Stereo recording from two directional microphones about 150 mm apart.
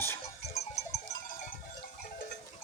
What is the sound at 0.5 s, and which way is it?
Sheep, 45° left (ahead or behind).